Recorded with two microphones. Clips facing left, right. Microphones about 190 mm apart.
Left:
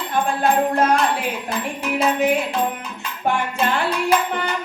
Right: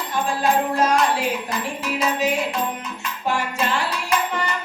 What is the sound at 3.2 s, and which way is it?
Music, 55° left (ahead or behind).